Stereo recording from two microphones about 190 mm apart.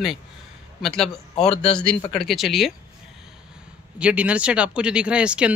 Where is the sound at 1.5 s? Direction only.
35° left (ahead or behind).